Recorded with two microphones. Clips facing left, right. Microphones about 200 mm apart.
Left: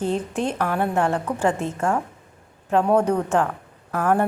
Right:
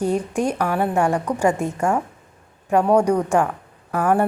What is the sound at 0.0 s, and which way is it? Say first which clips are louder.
A woman's voice: right 3 dB; 10° right (ahead or behind).